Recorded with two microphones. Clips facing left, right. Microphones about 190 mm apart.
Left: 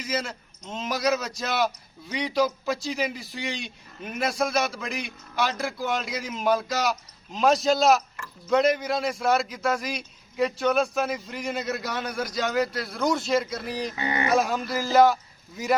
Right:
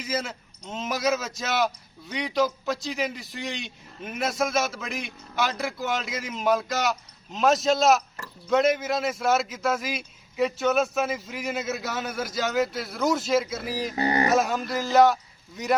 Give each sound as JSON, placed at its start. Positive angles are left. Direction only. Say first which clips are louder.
{"t": 0.0, "sound": "a man's voice", "louder": "even", "side_deg": 0}
{"t": 13.9, "sound": "speech", "louder": "right 8 dB", "side_deg": -35}
{"t": 14.3, "sound": "a man's voice", "louder": "even", "side_deg": 0}